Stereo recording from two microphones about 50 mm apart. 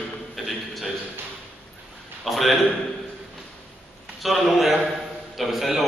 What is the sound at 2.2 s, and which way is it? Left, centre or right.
Speech, centre.